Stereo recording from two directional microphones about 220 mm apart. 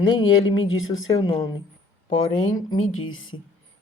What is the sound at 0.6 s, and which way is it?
Speech, 65° left (ahead or behind).